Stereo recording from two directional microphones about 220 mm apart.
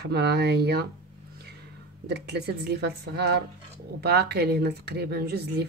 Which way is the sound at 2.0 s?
50° right (ahead or behind).